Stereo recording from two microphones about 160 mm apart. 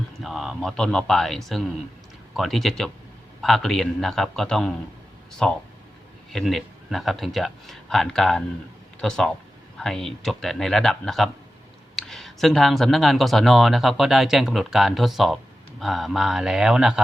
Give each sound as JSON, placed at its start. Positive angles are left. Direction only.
{"t": 0.2, "sound": "speech", "side_deg": 0}